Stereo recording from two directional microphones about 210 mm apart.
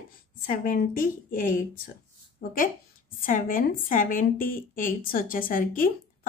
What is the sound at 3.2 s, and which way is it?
A woman's voice, 40° left (ahead or behind).